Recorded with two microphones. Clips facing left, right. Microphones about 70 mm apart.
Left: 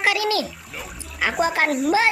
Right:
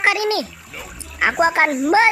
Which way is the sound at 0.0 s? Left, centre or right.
Right.